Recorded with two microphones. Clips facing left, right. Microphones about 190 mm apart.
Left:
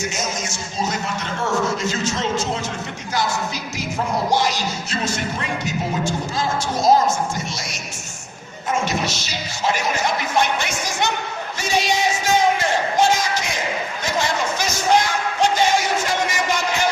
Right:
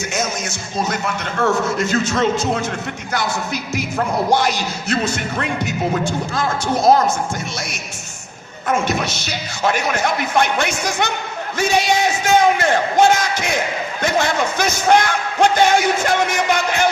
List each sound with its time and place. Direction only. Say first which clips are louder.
0.1 s music: right 4 dB; 60° right (ahead or behind)
8.6 s music: right 3 dB; 60° right (ahead or behind)